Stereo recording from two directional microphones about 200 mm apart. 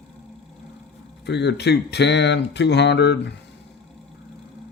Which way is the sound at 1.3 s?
60° left (ahead or behind).